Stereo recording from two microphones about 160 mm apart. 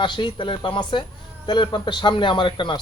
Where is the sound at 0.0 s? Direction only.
30° left (ahead or behind).